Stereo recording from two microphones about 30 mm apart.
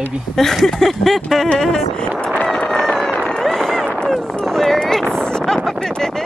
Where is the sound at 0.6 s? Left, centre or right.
Centre.